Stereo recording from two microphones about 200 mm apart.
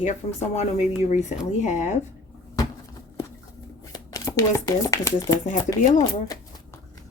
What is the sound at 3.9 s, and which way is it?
Speech, 15° left (ahead or behind).